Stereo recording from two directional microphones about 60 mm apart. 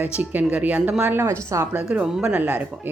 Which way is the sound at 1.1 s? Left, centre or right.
Right.